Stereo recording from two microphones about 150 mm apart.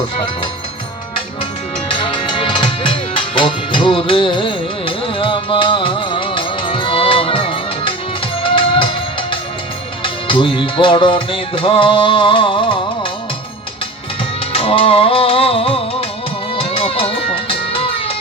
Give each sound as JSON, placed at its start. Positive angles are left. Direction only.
{"t": 1.9, "sound": "music", "side_deg": 35}
{"t": 14.5, "sound": "music", "side_deg": 40}